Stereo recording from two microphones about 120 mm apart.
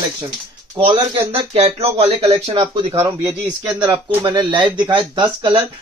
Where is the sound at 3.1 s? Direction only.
30° right (ahead or behind).